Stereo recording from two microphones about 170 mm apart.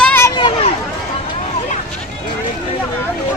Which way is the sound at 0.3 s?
25° left (ahead or behind).